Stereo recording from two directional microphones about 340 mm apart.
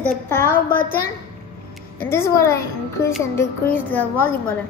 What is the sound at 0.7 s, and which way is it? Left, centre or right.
Speech, left.